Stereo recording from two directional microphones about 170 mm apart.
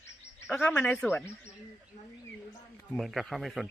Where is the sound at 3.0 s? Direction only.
Centre (ahead or behind).